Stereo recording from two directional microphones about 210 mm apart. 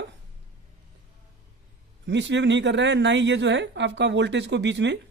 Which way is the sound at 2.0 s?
55° right (ahead or behind).